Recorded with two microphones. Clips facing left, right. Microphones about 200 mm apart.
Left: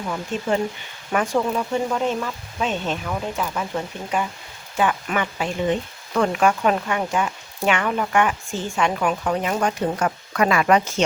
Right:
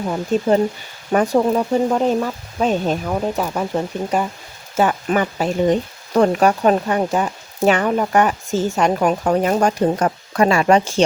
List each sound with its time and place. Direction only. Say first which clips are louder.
0.1 s speech: right 7 dB; 35° right (ahead or behind)